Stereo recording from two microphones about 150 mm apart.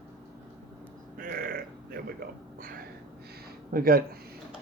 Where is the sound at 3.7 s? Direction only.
75° right (ahead or behind).